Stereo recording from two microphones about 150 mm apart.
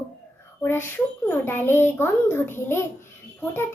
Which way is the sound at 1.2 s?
15° left (ahead or behind).